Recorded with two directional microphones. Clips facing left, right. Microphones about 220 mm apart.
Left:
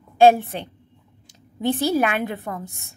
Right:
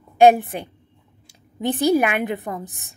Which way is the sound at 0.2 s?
15° right (ahead or behind).